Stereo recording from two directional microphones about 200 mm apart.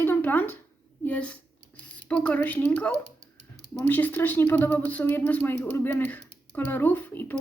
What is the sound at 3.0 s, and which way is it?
Typing, 35° right (ahead or behind).